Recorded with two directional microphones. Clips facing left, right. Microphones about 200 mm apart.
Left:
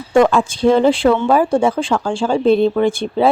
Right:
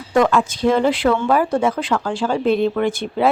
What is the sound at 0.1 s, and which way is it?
Speech, 30° left (ahead or behind).